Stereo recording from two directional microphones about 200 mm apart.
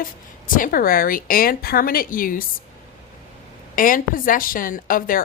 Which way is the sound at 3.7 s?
45° left (ahead or behind).